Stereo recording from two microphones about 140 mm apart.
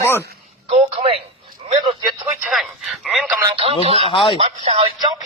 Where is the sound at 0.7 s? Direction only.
45° right (ahead or behind).